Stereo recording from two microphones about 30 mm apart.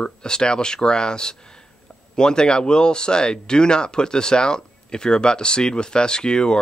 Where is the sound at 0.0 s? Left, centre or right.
Left.